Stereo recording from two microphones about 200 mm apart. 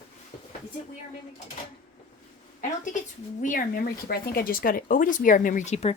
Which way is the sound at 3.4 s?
40° left (ahead or behind).